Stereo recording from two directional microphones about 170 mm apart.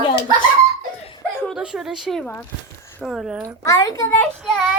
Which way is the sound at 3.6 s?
20° left (ahead or behind).